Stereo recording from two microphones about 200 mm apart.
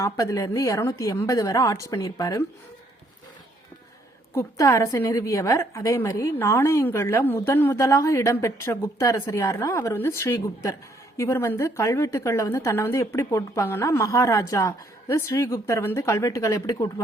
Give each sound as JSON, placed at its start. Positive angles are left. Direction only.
{"t": 0.0, "sound": "a woman's voice", "side_deg": 15}
{"t": 4.4, "sound": "a woman's voice", "side_deg": 15}